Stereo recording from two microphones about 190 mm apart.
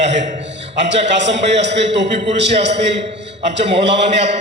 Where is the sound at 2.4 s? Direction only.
65° right (ahead or behind).